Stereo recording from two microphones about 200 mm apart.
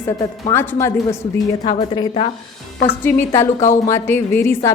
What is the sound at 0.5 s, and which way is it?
A woman's voice, 10° left (ahead or behind).